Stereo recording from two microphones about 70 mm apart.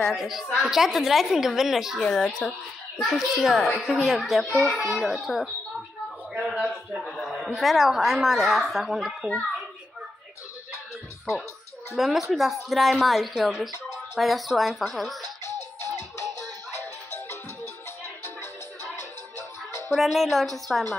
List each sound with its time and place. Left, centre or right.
0.0 s a woman's voice: centre
6.3 s a man's voice: centre
6.7 s a woman's voice: centre
11.9 s a woman's voice: centre
18.0 s marimba: left
19.3 s music: left
19.9 s a woman's voice: centre